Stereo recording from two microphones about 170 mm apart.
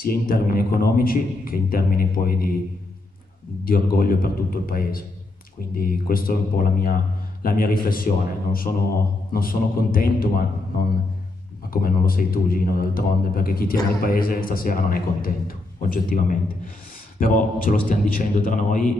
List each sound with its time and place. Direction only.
0.0 s a man's voice: 60° left (ahead or behind)
3.6 s a man's voice: 60° left (ahead or behind)